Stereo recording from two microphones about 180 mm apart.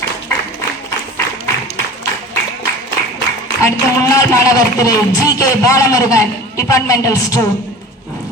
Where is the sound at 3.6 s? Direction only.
15° left (ahead or behind).